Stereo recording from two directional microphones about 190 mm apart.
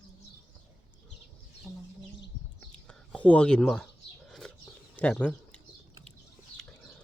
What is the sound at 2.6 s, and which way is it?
Bird, 5° left (ahead or behind).